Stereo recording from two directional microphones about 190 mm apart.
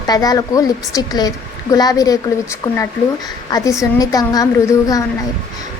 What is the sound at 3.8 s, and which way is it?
A woman's voice, 20° left (ahead or behind).